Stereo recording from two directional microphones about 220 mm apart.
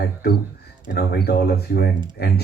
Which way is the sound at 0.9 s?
45° left (ahead or behind).